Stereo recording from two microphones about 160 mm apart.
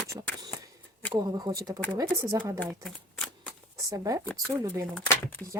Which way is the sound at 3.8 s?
20° right (ahead or behind).